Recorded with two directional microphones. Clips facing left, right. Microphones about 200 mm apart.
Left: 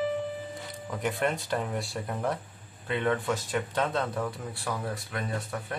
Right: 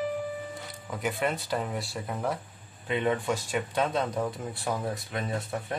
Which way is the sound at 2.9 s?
15° right (ahead or behind).